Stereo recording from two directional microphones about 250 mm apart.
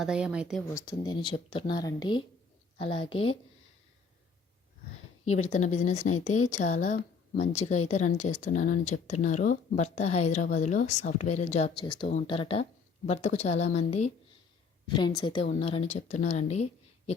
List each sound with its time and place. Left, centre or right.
0.0 s speech: centre
0.7 s speech: centre
5.2 s a woman's voice: left